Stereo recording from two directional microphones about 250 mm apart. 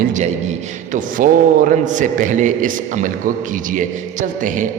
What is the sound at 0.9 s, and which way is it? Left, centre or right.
A man's voice, right.